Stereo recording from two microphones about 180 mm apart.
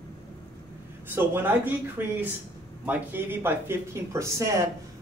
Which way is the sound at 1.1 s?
10° right (ahead or behind).